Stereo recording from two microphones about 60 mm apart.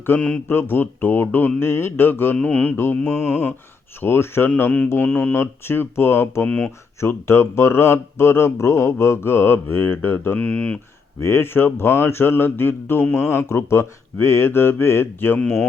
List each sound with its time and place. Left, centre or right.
0.4 s speech: left
2.4 s speech: left
2.7 s speech: left
10.3 s speech: left
11.2 s speech: left